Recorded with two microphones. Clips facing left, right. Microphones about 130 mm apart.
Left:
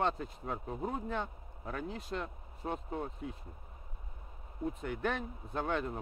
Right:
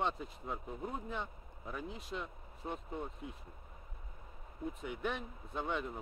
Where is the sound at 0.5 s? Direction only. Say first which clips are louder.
Left 4 dB; 45° left (ahead or behind).